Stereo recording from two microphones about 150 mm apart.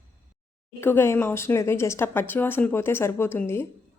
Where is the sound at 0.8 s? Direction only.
15° left (ahead or behind).